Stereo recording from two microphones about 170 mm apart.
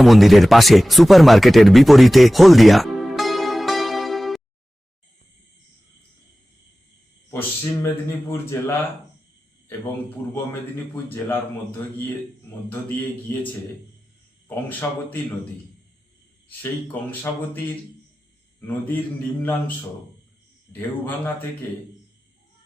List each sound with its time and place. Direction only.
0.0 s speech: centre (ahead or behind)
7.3 s speech: 10° left (ahead or behind)
10.9 s speech: 10° left (ahead or behind)
12.6 s speech: 10° left (ahead or behind)
16.5 s speech: 10° left (ahead or behind)
19.4 s speech: 10° left (ahead or behind)
20.7 s speech: 10° left (ahead or behind)